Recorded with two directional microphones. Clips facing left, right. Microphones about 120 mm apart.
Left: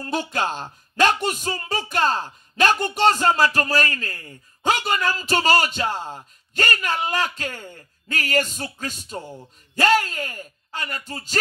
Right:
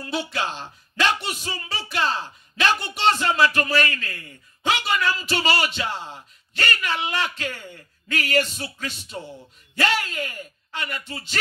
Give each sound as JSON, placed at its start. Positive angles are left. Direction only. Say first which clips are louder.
{"t": 0.0, "sound": "speech", "louder": "left 3 dB", "side_deg": 45}